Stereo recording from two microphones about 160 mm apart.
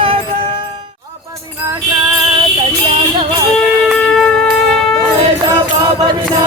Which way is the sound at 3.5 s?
5° left (ahead or behind).